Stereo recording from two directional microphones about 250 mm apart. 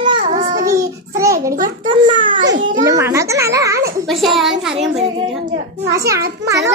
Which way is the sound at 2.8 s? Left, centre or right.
Centre.